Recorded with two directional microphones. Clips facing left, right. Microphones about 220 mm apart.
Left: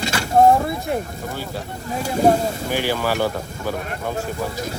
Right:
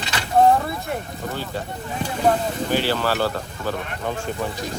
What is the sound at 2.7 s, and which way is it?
Speech, 10° left (ahead or behind).